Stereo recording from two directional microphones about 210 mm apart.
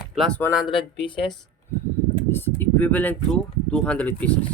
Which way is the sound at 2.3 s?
10° left (ahead or behind).